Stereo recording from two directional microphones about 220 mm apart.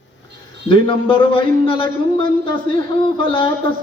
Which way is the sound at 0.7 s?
25° left (ahead or behind).